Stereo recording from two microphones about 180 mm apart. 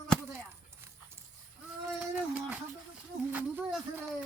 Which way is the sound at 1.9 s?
10° right (ahead or behind).